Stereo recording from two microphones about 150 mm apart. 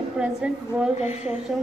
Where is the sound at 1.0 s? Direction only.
45° left (ahead or behind).